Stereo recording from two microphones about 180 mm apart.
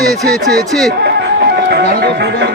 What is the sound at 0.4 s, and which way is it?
Speech, centre (ahead or behind).